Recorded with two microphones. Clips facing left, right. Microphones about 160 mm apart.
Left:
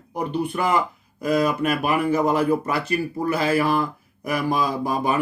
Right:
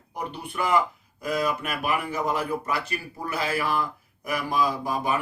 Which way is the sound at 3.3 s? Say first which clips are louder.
Left 6 dB; 35° left (ahead or behind).